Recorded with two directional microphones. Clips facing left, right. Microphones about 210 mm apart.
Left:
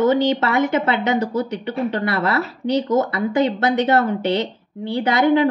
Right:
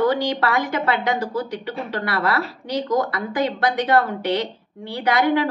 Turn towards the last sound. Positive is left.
turn(degrees=25)  # may be behind; listen again after turning